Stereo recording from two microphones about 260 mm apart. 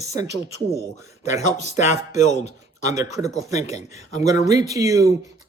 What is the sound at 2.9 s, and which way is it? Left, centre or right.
Speech, centre.